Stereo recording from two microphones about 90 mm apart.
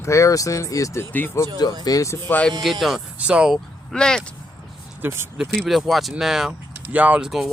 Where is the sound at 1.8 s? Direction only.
40° left (ahead or behind); by 2.5 s 20° left (ahead or behind).